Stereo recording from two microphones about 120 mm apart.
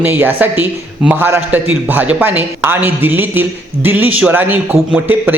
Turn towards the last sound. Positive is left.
turn(degrees=-15)  # may be behind; listen again after turning